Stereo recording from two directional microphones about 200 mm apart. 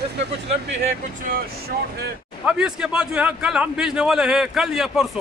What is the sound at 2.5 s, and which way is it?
A man's voice, 5° right (ahead or behind).